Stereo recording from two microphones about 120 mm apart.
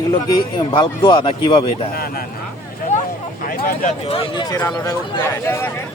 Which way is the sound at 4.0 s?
50° left (ahead or behind).